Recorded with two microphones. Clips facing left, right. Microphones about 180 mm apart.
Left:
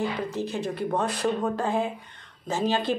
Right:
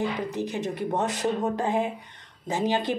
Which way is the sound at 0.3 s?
15° right (ahead or behind).